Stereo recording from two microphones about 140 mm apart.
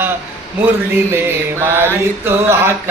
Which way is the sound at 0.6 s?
15° right (ahead or behind).